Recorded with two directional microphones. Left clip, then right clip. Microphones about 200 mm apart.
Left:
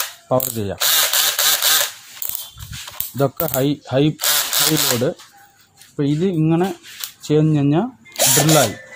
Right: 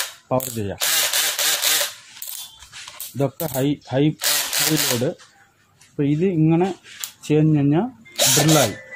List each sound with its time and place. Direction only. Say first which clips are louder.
0.3 s speech: left 4 dB; 35° left (ahead or behind)
0.7 s a sound: left 4 dB; 15° left (ahead or behind)
3.2 s speech: left 4 dB; 40° left (ahead or behind)
4.2 s a sound: left 3 dB; 15° left (ahead or behind)
5.9 s speech: left 1 dB; 25° left (ahead or behind)
8.2 s drill: left 1 dB; 10° left (ahead or behind)